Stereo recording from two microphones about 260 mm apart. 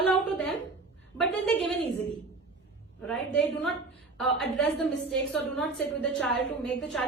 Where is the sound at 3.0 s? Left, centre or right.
Centre.